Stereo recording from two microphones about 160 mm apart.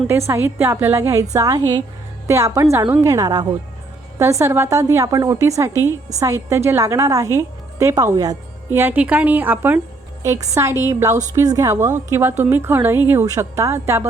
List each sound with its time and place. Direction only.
0.1 s a woman's voice: 15° right (ahead or behind)